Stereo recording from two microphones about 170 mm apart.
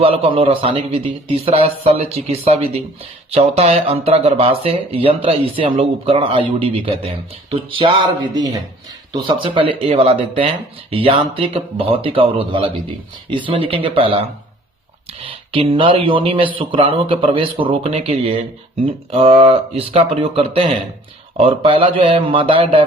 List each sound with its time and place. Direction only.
0.0 s speech: 35° right (ahead or behind)